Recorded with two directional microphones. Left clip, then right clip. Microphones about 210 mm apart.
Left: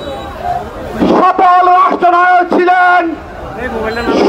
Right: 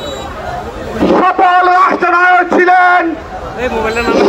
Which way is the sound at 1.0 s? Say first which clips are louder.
Left 1 dB; 45° left (ahead or behind).